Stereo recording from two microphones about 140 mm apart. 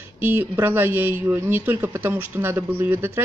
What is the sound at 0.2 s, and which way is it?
Speech, 15° right (ahead or behind).